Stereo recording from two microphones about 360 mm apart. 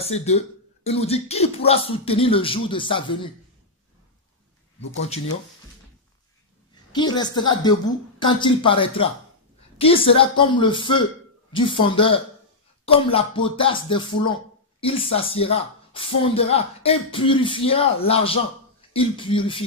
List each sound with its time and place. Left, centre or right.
0.0 s speech: centre
6.9 s speech: centre